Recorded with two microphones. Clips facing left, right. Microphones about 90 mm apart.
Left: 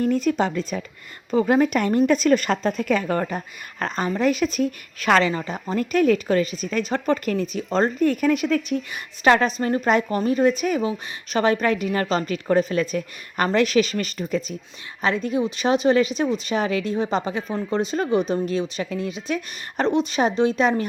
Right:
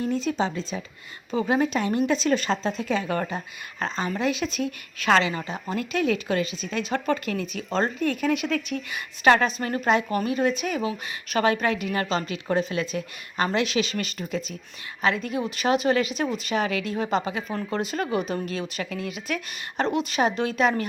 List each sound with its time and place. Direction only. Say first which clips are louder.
0.0 s speech: left 5 dB; 50° left (ahead or behind)
1.3 s a woman's voice: left 5 dB; 45° left (ahead or behind)